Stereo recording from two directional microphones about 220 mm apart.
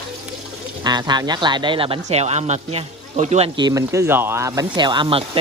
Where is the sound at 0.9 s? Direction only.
20° right (ahead or behind).